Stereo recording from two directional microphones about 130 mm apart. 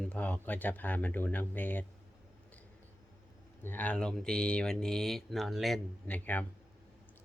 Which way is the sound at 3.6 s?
10° left (ahead or behind).